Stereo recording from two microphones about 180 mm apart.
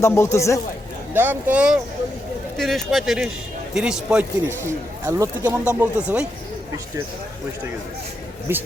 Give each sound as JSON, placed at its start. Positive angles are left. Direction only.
{"t": 0.0, "sound": "a man's voice", "side_deg": 15}
{"t": 1.1, "sound": "speech", "side_deg": -10}
{"t": 8.5, "sound": "speech", "side_deg": -15}